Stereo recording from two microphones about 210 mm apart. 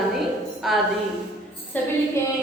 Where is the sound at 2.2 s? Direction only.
15° left (ahead or behind).